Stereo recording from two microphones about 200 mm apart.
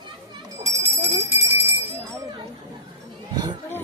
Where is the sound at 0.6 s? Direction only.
15° right (ahead or behind).